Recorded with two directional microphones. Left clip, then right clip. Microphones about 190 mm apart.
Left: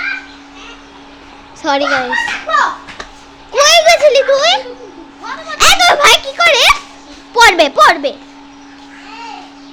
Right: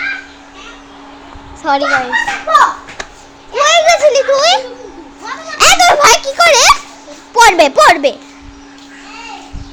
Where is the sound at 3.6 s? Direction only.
30° left (ahead or behind).